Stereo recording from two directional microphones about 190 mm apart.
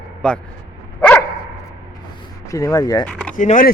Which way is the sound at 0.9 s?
10° left (ahead or behind).